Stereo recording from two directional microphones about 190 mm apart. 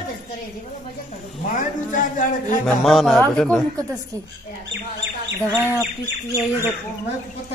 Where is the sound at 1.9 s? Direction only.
45° left (ahead or behind).